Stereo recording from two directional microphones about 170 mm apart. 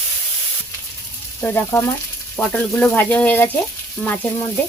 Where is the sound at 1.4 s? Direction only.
15° left (ahead or behind).